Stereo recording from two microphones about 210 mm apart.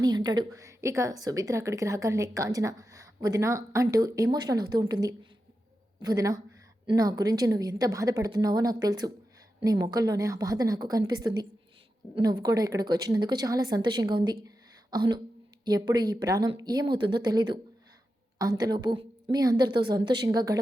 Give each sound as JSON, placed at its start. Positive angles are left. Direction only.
{"t": 0.0, "sound": "a woman's voice", "side_deg": -20}
{"t": 14.4, "sound": "a sound", "side_deg": -20}
{"t": 15.6, "sound": "a woman's voice", "side_deg": -20}